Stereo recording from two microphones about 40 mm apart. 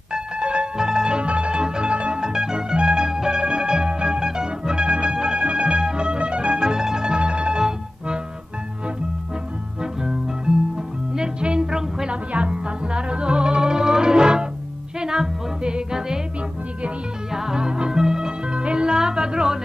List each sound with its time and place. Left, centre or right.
0.1 s music: right
9.8 s music: centre
12.1 s music: right
17.3 s music: centre
18.5 s music: right